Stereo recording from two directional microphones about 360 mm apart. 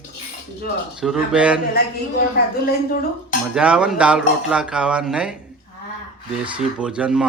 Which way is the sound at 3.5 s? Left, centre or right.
Centre.